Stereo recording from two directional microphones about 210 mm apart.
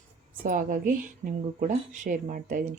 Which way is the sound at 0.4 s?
40° right (ahead or behind).